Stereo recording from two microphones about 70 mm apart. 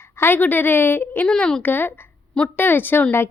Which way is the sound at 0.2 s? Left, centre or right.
Left.